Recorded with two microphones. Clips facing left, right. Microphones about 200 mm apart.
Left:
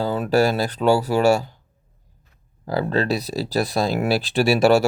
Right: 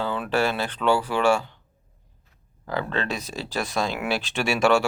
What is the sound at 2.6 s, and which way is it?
Speech, 35° left (ahead or behind).